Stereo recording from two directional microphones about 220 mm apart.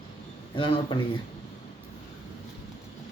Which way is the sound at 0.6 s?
20° left (ahead or behind).